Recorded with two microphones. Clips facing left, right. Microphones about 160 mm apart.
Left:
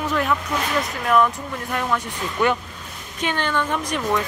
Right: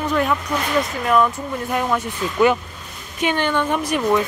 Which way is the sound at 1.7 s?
10° right (ahead or behind).